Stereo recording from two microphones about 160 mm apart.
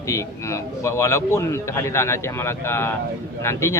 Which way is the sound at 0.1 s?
20° left (ahead or behind).